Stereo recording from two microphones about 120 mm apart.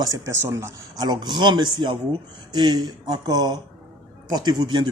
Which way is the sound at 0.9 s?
35° right (ahead or behind).